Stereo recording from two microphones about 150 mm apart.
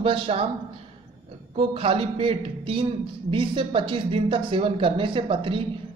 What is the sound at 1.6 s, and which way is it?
A man's voice, 40° right (ahead or behind).